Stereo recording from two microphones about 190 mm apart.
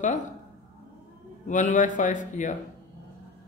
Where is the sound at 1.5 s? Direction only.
40° left (ahead or behind).